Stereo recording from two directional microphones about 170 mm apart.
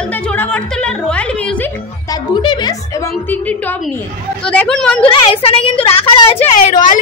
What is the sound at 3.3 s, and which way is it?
A woman's voice, 10° left (ahead or behind).